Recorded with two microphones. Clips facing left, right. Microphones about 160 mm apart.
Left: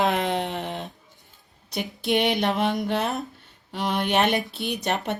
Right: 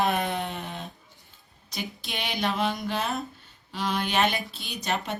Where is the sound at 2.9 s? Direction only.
65° left (ahead or behind).